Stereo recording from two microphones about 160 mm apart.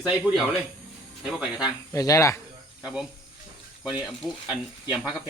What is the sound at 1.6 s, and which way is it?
Speech, 20° left (ahead or behind).